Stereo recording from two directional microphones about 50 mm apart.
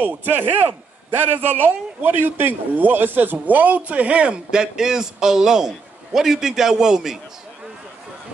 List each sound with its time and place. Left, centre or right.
0.0 s a man's voice: right
4.5 s a man's voice: centre